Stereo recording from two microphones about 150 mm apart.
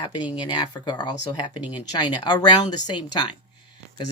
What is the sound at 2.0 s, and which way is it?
Speech, 25° left (ahead or behind).